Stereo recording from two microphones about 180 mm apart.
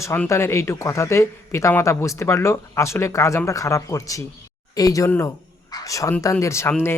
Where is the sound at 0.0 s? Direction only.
15° left (ahead or behind).